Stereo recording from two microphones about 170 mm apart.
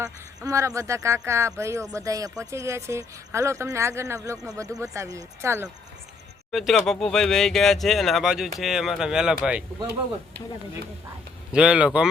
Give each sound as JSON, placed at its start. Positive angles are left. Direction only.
{"t": 0.0, "sound": "speech", "side_deg": -20}
{"t": 6.5, "sound": "speech", "side_deg": 0}
{"t": 11.5, "sound": "speech", "side_deg": -5}